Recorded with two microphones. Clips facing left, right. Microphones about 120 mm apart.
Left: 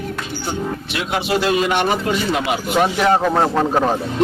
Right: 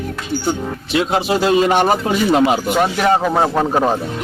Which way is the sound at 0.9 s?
30° right (ahead or behind).